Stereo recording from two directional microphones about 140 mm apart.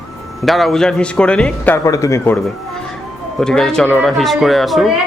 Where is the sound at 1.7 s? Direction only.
25° left (ahead or behind).